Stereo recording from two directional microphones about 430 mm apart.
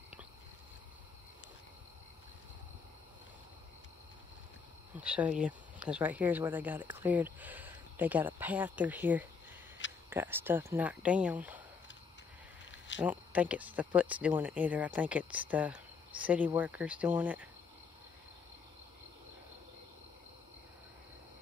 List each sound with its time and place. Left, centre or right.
4.9 s speech: centre
12.7 s a sound: left
13.0 s speech: centre